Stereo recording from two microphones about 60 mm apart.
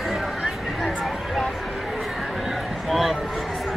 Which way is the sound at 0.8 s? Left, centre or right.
Centre.